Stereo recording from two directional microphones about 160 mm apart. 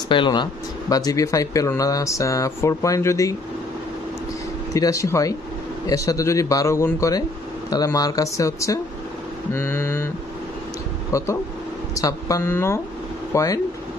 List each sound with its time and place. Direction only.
0.1 s speech: 30° left (ahead or behind)
4.7 s speech: 20° left (ahead or behind)
9.5 s mantra: 15° left (ahead or behind)
11.1 s speech: 20° left (ahead or behind)